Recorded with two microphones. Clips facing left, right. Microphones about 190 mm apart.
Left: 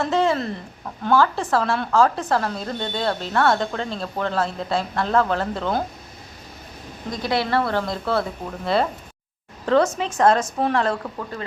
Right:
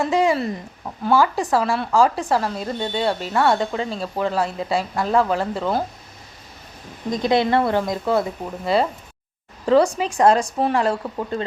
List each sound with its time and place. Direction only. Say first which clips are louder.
0.1 s speech: right 2 dB; 15° right (ahead or behind)
7.1 s speech: right 4 dB; 20° right (ahead or behind)
11.2 s speech: right 6 dB; 25° right (ahead or behind)